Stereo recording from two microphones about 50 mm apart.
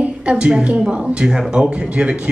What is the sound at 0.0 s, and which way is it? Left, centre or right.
A woman's voice, right.